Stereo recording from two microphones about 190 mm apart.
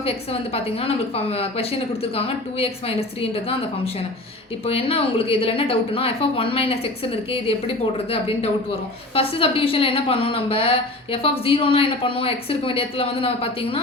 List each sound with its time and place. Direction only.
0.0 s a woman's voice: 30° left (ahead or behind)